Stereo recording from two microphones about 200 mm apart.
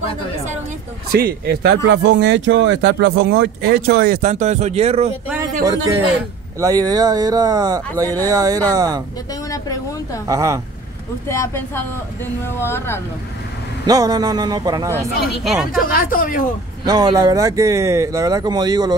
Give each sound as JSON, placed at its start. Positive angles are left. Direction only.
{"t": 1.1, "sound": "speech", "side_deg": -50}
{"t": 4.2, "sound": "speech", "side_deg": -35}
{"t": 5.7, "sound": "speech", "side_deg": -15}
{"t": 9.3, "sound": "a sound", "side_deg": 15}
{"t": 10.2, "sound": "speech", "side_deg": -15}
{"t": 11.2, "sound": "speech", "side_deg": 15}
{"t": 13.8, "sound": "speech", "side_deg": -20}
{"t": 15.3, "sound": "speech", "side_deg": 0}
{"t": 15.7, "sound": "speech", "side_deg": 45}
{"t": 16.8, "sound": "speech", "side_deg": -20}